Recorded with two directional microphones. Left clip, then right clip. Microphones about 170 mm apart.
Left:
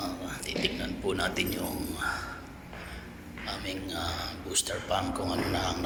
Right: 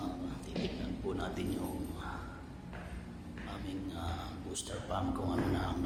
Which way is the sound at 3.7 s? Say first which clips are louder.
Left 7 dB; 5° right (ahead or behind).